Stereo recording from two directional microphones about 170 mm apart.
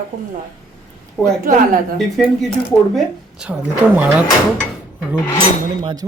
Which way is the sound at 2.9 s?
5° right (ahead or behind).